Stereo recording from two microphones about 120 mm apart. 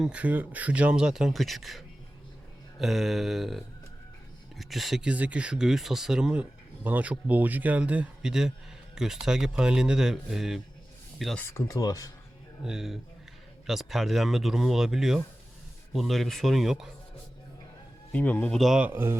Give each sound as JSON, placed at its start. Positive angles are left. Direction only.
{"t": 0.0, "sound": "speech", "side_deg": -10}
{"t": 11.3, "sound": "speech", "side_deg": 20}
{"t": 12.6, "sound": "speech", "side_deg": -5}
{"t": 18.1, "sound": "a man's voice", "side_deg": 15}
{"t": 18.6, "sound": "speech", "side_deg": -5}
{"t": 18.9, "sound": "speech", "side_deg": -20}